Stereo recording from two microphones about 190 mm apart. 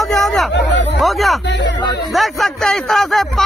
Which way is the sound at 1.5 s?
70° left (ahead or behind).